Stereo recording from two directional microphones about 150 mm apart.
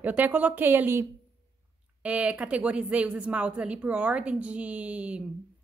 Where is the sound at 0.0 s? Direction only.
10° right (ahead or behind).